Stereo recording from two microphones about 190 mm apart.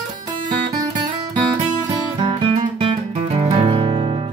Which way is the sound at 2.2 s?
25° right (ahead or behind).